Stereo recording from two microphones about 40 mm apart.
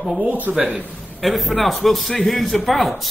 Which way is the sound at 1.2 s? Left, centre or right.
Centre.